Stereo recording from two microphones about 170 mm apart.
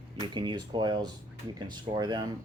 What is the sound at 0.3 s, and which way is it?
Speech, 25° right (ahead or behind).